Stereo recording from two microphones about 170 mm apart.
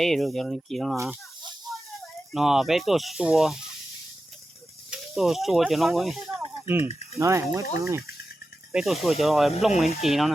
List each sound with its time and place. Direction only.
0.0 s speech: centre (ahead or behind)
2.3 s speech: centre (ahead or behind)
4.9 s speech: centre (ahead or behind)
7.2 s speech: 15° right (ahead or behind)
8.7 s speech: centre (ahead or behind)